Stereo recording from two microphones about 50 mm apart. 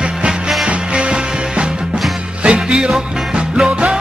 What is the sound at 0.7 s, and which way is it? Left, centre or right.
Music, right.